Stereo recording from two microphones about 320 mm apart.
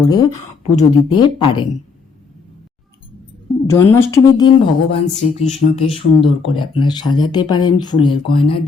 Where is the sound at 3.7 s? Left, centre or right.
Centre.